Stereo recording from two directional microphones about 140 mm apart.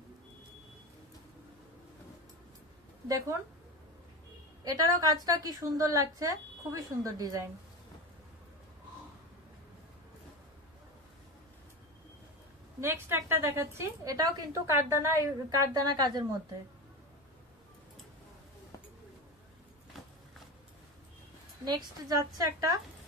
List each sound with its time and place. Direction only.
3.1 s a woman's voice: 25° right (ahead or behind)
4.6 s a woman's voice: 25° right (ahead or behind)
12.8 s a woman's voice: 15° right (ahead or behind)
15.6 s a woman's voice: 30° right (ahead or behind)
21.6 s a woman's voice: 30° right (ahead or behind)